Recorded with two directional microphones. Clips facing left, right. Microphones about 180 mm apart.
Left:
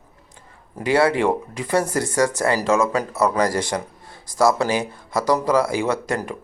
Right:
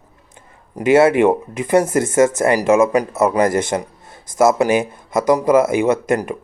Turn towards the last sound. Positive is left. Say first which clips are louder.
# right 6 dB
turn(degrees=-20)  # may be behind; listen again after turning